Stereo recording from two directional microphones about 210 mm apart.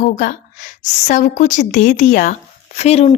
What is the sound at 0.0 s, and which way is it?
A woman's voice, 35° left (ahead or behind).